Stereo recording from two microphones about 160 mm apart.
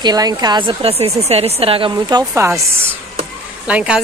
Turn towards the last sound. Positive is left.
turn(degrees=-5)  # may be behind; listen again after turning